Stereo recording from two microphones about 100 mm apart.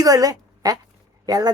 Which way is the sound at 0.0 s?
40° right (ahead or behind).